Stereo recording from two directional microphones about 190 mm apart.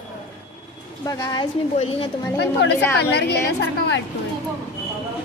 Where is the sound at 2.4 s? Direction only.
60° left (ahead or behind).